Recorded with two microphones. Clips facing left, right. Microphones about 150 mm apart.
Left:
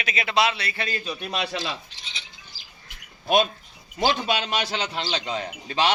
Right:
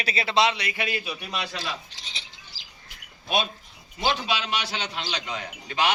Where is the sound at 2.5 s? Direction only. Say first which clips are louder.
Even; 90° right.